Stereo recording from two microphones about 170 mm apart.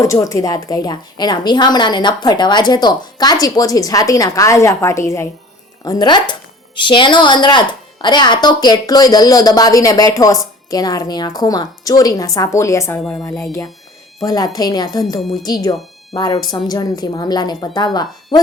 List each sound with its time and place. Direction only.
0.0 s a woman's voice: 20° left (ahead or behind)
13.0 s speech: 5° left (ahead or behind)
13.4 s a woman's voice: 15° left (ahead or behind)
15.2 s speech: centre (ahead or behind)
15.4 s a woman's voice: 20° left (ahead or behind)